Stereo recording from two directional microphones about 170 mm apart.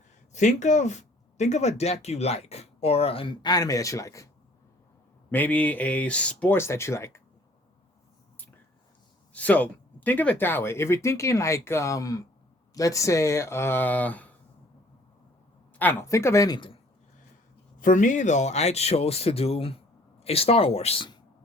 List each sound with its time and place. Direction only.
0.3 s speech: 45° left (ahead or behind); by 4.3 s 20° left (ahead or behind)
5.3 s speech: 10° left (ahead or behind)
9.3 s speech: 10° left (ahead or behind)
15.8 s speech: 10° left (ahead or behind); by 16.8 s 30° left (ahead or behind)
17.7 s speech: 50° left (ahead or behind); by 21.2 s 30° left (ahead or behind)